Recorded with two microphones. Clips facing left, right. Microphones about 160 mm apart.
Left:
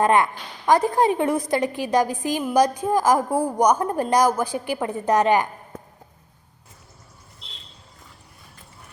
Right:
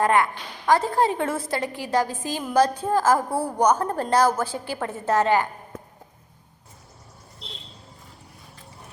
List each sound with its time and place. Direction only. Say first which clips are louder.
0.0 s a woman's voice: left 2 dB; 20° left (ahead or behind)